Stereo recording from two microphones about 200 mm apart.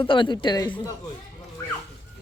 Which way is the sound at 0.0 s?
25° left (ahead or behind).